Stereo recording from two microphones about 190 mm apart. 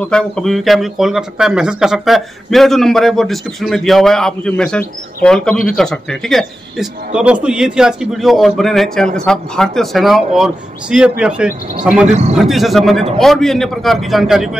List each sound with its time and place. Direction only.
0.0 s a man's voice: 5° left (ahead or behind)
12.1 s a man's voice: 35° right (ahead or behind)
12.4 s a man's voice: centre (ahead or behind)